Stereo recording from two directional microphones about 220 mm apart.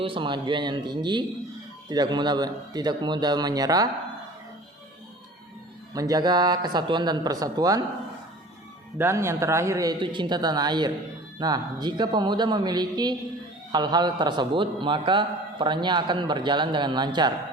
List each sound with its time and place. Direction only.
0.0 s a man's voice: 25° right (ahead or behind)
5.9 s a man's voice: 15° right (ahead or behind)
9.0 s a man's voice: 10° right (ahead or behind)